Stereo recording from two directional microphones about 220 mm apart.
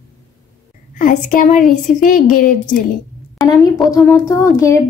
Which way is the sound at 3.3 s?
15° left (ahead or behind).